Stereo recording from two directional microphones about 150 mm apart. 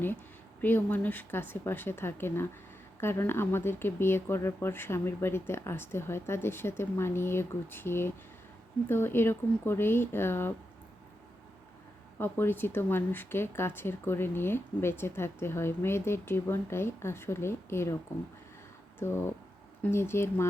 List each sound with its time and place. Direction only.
0.6 s speech: 10° left (ahead or behind)
12.2 s speech: 15° left (ahead or behind)
18.9 s speech: 15° left (ahead or behind)